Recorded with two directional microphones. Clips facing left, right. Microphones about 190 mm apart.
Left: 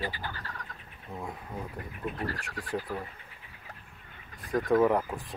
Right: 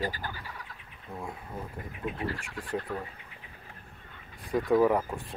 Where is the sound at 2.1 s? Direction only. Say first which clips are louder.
Right 1 dB; 40° left (ahead or behind).